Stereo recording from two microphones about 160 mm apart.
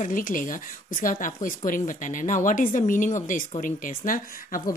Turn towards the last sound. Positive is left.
turn(degrees=60)  # may be behind; listen again after turning